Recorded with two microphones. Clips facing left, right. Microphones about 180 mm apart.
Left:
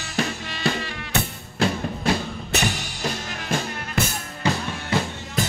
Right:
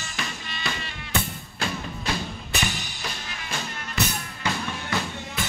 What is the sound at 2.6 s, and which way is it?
Music, 45° left (ahead or behind).